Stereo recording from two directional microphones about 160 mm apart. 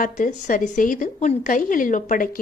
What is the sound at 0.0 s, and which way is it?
A woman's voice, 55° left (ahead or behind).